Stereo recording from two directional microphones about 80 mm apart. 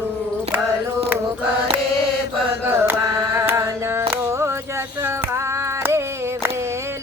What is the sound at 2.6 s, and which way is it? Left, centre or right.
Carnatic music, right.